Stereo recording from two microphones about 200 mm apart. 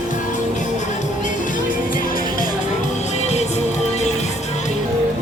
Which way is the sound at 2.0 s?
45° left (ahead or behind).